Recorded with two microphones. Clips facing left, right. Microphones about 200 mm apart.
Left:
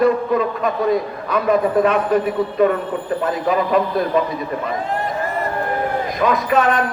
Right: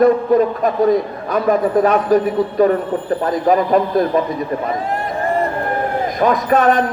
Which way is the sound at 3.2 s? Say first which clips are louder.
Right 4 dB; 40° right (ahead or behind).